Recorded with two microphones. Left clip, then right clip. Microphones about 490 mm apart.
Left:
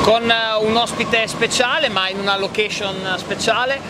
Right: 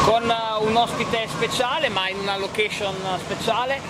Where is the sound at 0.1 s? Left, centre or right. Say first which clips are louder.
Left 5 dB; left.